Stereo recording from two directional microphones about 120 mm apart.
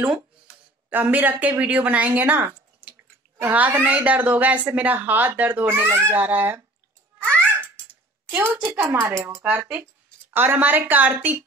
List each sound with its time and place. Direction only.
0.8 s speech: 15° right (ahead or behind)
7.3 s cat: 15° right (ahead or behind)
8.5 s speech: 20° right (ahead or behind)